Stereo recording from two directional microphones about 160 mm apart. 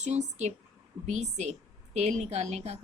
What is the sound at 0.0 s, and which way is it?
A woman's voice, 45° right (ahead or behind).